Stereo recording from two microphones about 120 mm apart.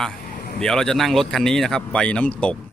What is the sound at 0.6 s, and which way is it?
Speech, 5° left (ahead or behind).